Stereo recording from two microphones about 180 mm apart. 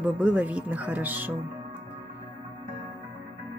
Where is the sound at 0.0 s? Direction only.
5° right (ahead or behind).